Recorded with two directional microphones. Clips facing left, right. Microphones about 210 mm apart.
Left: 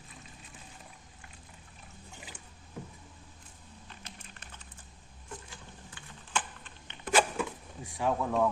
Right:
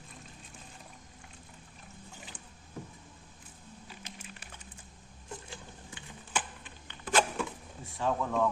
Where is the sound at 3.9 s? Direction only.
5° right (ahead or behind).